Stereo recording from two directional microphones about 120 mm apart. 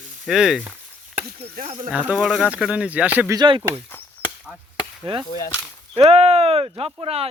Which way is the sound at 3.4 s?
45° right (ahead or behind).